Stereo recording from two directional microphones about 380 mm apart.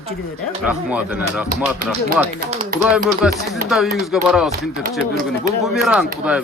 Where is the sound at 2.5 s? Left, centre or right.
Centre.